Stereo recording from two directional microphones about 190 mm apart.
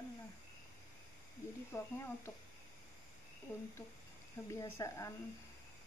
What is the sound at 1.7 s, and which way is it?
Speech, 15° left (ahead or behind).